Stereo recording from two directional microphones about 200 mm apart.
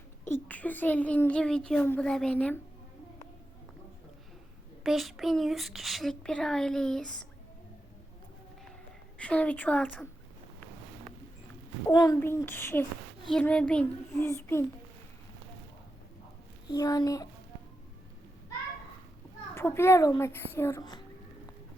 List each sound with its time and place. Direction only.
0.3 s a child's voice: 10° left (ahead or behind)
4.8 s a child's voice: centre (ahead or behind)
9.1 s a child's voice: 5° left (ahead or behind)
11.9 s a child's voice: 15° left (ahead or behind)
16.6 s a child's voice: 20° left (ahead or behind)
19.5 s a child's voice: 10° left (ahead or behind)